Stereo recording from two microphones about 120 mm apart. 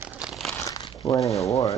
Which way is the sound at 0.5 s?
25° left (ahead or behind).